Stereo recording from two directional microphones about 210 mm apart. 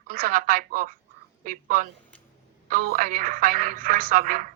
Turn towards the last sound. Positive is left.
turn(degrees=-40)  # may be behind; listen again after turning